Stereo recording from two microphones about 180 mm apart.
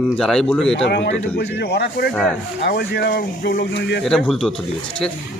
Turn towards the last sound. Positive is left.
turn(degrees=5)  # may be behind; listen again after turning